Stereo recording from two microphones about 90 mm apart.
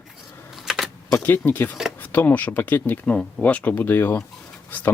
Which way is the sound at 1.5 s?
20° left (ahead or behind).